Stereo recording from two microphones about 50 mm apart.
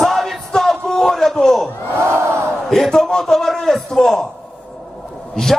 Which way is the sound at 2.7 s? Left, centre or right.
Centre.